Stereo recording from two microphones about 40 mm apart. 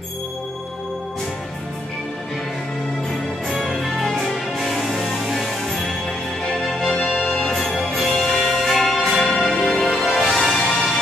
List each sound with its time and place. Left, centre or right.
3.6 s music: centre
6.4 s music: centre
9.6 s music: centre